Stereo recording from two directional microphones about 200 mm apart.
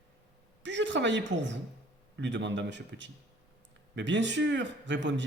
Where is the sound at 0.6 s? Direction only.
65° right (ahead or behind).